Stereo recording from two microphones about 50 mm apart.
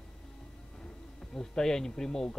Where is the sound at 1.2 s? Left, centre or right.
Centre.